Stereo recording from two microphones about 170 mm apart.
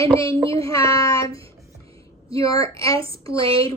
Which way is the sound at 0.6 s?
20° left (ahead or behind).